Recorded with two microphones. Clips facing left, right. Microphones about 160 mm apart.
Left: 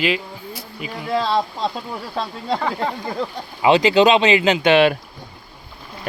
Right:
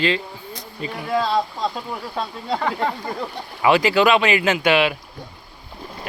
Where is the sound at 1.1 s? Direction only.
25° left (ahead or behind).